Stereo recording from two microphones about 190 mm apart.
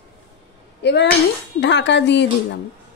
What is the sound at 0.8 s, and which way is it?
A woman's voice, 60° left (ahead or behind).